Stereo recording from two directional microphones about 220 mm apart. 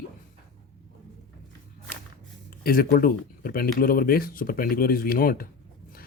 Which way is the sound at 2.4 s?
45° left (ahead or behind).